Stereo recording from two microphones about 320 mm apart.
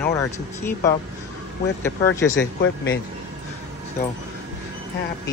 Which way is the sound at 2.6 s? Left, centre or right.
Left.